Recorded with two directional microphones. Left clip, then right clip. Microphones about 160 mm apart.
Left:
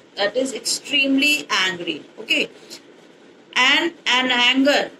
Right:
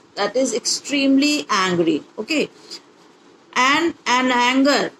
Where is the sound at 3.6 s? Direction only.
40° right (ahead or behind).